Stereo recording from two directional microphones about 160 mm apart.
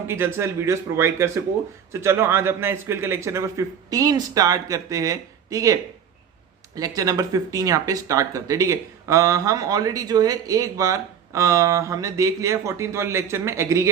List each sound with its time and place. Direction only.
0.1 s speech: 15° right (ahead or behind)